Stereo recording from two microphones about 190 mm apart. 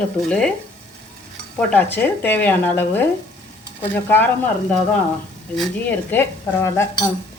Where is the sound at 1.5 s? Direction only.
10° left (ahead or behind).